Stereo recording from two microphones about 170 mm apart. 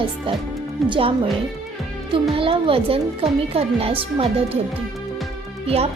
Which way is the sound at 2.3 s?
35° right (ahead or behind).